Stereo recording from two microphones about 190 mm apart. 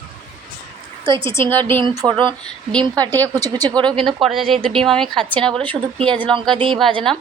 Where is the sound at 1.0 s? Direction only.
25° right (ahead or behind).